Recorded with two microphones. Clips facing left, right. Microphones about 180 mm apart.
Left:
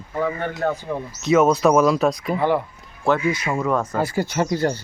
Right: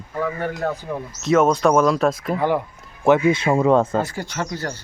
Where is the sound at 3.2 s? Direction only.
25° right (ahead or behind).